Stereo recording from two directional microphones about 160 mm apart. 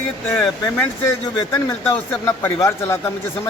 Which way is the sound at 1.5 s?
15° left (ahead or behind).